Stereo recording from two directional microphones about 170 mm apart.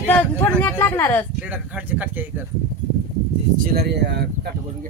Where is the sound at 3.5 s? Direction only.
60° right (ahead or behind); by 4.5 s 80° right.